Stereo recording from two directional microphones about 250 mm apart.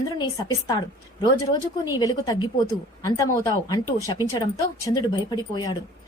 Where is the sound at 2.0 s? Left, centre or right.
Centre.